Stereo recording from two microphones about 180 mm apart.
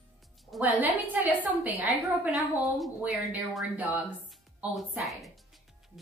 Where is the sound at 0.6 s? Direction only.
10° right (ahead or behind).